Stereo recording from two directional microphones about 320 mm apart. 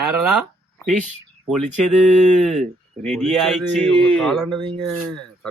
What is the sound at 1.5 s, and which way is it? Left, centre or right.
Speech, centre.